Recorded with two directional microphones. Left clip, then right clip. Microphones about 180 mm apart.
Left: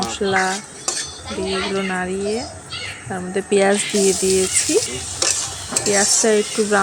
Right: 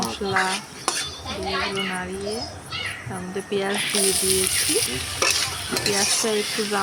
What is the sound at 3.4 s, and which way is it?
Stir, 25° left (ahead or behind).